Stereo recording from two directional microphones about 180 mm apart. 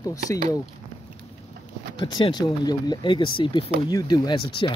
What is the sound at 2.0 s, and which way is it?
Speech, 25° left (ahead or behind).